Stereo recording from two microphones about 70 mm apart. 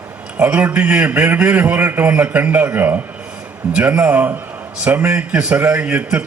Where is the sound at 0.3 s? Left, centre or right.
Right.